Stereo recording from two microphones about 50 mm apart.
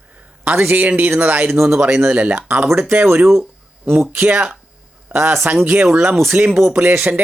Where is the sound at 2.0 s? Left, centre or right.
Right.